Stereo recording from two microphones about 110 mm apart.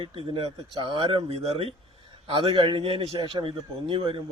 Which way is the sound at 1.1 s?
65° right (ahead or behind).